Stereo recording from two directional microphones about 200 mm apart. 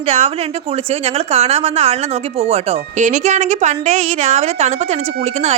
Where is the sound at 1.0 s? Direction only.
30° right (ahead or behind).